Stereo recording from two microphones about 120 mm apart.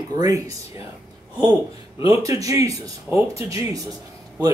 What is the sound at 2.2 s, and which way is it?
Speech, 30° right (ahead or behind).